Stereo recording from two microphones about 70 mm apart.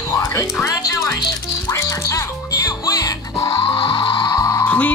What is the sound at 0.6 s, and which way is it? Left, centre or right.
Speech, left.